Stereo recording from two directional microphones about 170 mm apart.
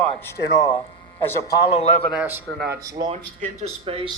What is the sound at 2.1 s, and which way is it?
Speech, 10° right (ahead or behind).